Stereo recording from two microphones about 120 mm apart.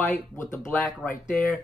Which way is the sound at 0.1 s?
20° left (ahead or behind).